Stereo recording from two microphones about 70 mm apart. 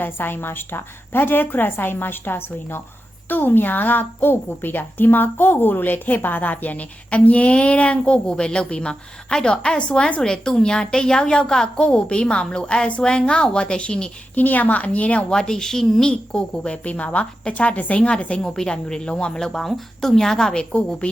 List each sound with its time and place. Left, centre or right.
0.0 s a woman's voice: left; by 21.1 s centre